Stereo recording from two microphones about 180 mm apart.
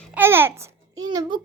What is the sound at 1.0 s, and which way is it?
Speech, 25° right (ahead or behind).